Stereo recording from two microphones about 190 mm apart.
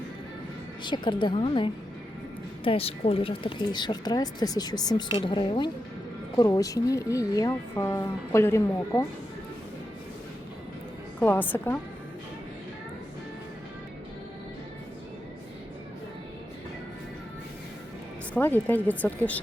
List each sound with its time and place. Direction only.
0.9 s speech: 25° left (ahead or behind)
11.2 s speech: 10° left (ahead or behind)
18.3 s speech: 10° left (ahead or behind)